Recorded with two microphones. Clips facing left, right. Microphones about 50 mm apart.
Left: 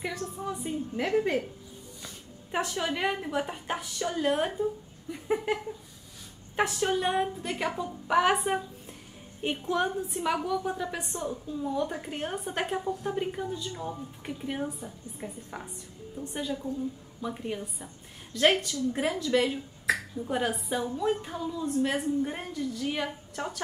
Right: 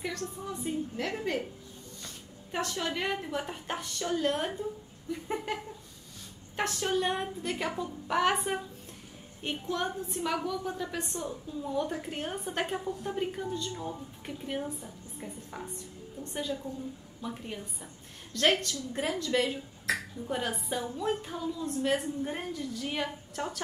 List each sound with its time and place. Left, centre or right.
0.0 s a woman's voice: centre